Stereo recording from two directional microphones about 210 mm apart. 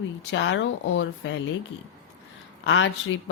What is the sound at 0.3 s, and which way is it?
Speech, 60° left (ahead or behind).